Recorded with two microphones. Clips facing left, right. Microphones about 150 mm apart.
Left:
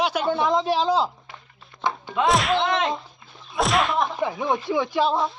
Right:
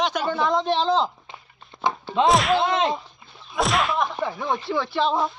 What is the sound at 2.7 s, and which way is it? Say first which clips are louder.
Speech: right 1 dB; 25° right (ahead or behind).